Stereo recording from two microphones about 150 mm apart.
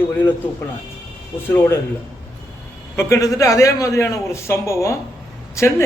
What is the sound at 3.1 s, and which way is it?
A man's voice, 20° left (ahead or behind).